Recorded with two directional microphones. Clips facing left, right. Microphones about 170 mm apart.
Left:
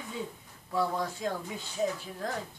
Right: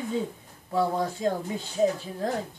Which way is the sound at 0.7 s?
25° right (ahead or behind).